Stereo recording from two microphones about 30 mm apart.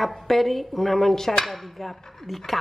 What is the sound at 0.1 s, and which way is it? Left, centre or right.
Speech, centre.